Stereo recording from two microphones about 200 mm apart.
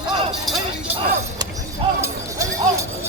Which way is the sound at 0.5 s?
Centre (ahead or behind).